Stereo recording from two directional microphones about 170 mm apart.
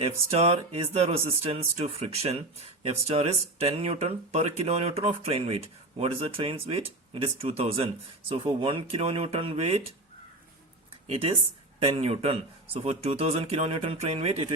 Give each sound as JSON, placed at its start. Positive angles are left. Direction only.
{"t": 0.0, "sound": "speech", "side_deg": -35}
{"t": 11.0, "sound": "speech", "side_deg": -35}